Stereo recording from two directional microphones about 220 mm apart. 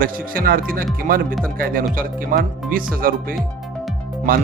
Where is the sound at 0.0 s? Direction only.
40° right (ahead or behind).